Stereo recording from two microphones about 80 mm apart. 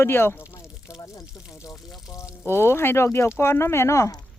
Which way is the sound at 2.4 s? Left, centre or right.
Left.